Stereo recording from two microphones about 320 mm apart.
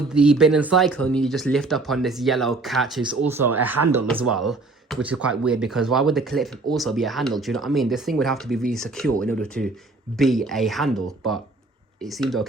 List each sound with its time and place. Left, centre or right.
0.1 s speech: centre
12.0 s speech: centre